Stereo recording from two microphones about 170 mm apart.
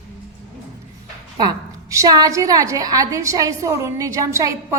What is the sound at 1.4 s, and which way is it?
A woman's voice, 20° right (ahead or behind).